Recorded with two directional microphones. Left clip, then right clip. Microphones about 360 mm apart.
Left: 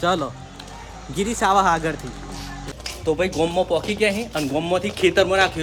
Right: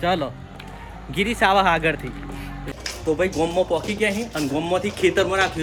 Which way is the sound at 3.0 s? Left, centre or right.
Centre.